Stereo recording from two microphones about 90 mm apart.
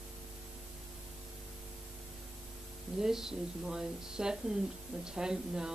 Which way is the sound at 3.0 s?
5° right (ahead or behind).